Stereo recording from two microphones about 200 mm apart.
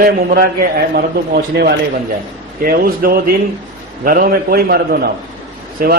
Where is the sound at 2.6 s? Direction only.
45° right (ahead or behind).